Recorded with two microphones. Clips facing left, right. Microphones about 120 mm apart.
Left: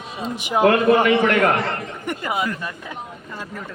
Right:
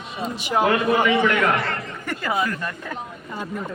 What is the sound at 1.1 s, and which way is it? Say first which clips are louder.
Speech: left 2 dB; 45° left (ahead or behind).